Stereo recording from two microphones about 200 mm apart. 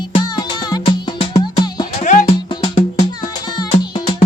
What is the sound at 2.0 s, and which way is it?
Music, 40° left (ahead or behind).